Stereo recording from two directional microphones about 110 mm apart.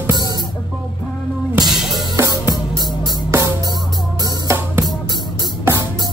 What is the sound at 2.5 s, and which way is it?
Music, 35° right (ahead or behind).